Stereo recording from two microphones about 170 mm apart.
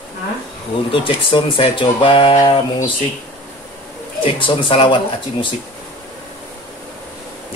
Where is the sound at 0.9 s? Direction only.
30° left (ahead or behind).